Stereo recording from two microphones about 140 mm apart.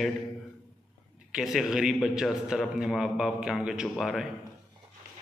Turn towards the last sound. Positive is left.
turn(degrees=-5)  # may be behind; listen again after turning